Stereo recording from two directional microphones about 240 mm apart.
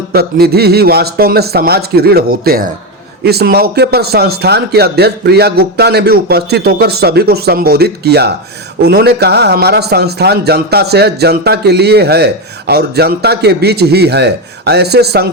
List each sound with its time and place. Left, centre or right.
0.1 s a man's voice: right